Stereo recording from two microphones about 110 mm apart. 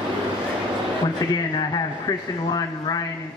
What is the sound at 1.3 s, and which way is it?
Speech, 35° left (ahead or behind).